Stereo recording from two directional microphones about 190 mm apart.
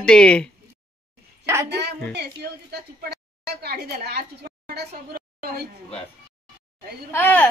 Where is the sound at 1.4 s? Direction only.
15° right (ahead or behind).